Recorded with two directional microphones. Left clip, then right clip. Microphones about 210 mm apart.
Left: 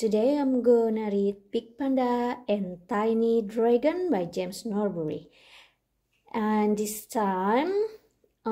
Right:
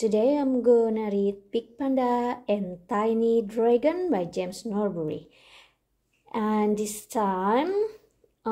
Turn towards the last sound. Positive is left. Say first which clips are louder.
# right 1 dB
turn(degrees=0)  # may be behind; listen again after turning